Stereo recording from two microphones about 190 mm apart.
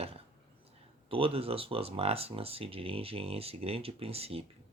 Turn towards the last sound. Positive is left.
turn(degrees=-30)  # may be behind; listen again after turning